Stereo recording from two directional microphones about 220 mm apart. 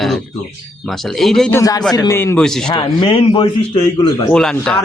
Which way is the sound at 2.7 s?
20° left (ahead or behind).